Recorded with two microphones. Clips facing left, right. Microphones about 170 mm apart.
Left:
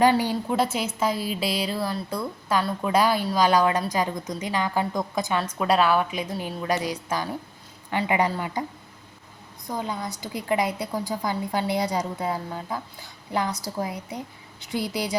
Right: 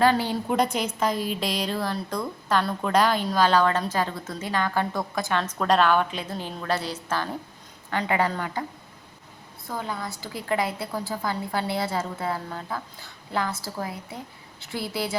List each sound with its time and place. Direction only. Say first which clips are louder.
0.0 s a woman's voice: left 1 dB; 10° left (ahead or behind)
9.6 s a woman's voice: left 2 dB; 20° left (ahead or behind)